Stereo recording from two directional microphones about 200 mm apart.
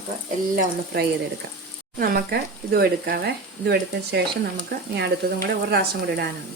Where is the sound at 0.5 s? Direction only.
50° right (ahead or behind).